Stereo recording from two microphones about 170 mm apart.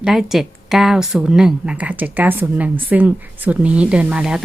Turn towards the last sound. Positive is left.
turn(degrees=-5)  # may be behind; listen again after turning